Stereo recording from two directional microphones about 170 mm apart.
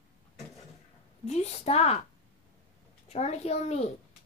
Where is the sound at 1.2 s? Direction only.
40° left (ahead or behind).